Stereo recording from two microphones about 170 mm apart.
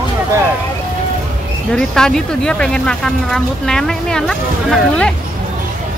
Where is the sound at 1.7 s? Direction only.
5° left (ahead or behind).